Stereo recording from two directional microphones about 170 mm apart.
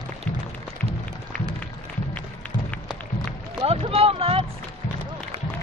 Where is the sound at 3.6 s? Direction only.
35° right (ahead or behind).